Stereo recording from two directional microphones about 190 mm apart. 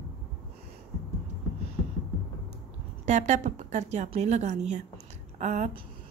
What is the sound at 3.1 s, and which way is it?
A woman's voice, 40° right (ahead or behind).